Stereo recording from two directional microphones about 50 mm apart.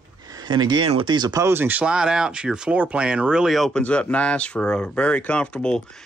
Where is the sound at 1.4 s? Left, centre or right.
Right.